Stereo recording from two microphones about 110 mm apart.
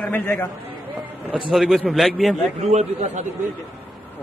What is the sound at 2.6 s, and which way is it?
Speech, 85° right.